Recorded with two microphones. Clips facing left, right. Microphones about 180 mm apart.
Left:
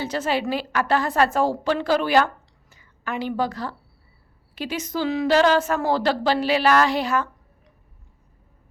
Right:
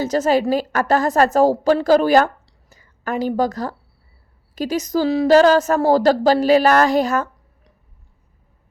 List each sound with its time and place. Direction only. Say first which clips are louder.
0.0 s a woman's voice: right 7 dB; 40° right (ahead or behind)